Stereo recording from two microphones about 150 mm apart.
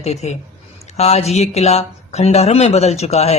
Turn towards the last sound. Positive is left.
turn(degrees=45)  # may be behind; listen again after turning